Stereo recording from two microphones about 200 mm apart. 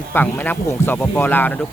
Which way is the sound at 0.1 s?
10° left (ahead or behind).